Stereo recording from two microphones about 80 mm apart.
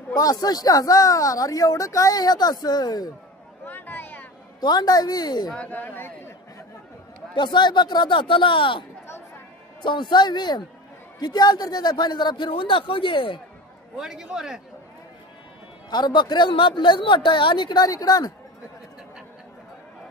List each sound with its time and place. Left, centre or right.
0.1 s speech: left
3.6 s a sound: left
4.6 s a woman's voice: left
5.5 s speech: centre
7.3 s speech: left
9.8 s speech: left
13.9 s a man's voice: centre
15.9 s speech: left